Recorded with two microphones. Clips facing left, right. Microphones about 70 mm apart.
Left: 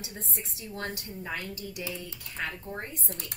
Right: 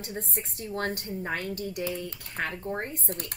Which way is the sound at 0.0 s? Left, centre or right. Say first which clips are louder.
Right 5 dB; right.